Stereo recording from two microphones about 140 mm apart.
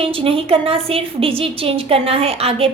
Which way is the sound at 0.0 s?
40° right (ahead or behind).